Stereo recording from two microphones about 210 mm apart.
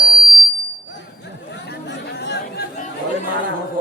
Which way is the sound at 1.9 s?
55° left (ahead or behind).